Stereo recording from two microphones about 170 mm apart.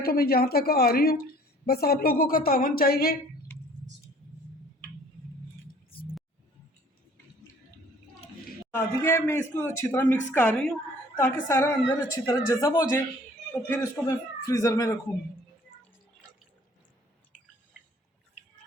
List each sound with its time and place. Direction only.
0.0 s a woman's voice: 60° left (ahead or behind)
8.7 s a man's voice: 15° left (ahead or behind)